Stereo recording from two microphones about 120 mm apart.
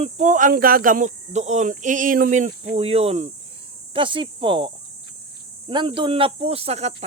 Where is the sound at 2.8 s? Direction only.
60° right (ahead or behind).